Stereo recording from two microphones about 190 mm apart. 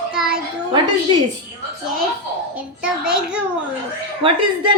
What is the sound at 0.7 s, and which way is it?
Speech, 25° right (ahead or behind).